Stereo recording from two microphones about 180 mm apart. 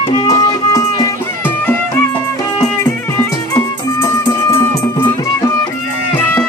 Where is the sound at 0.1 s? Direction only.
20° left (ahead or behind).